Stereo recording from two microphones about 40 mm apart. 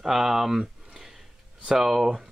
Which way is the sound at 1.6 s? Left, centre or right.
Centre.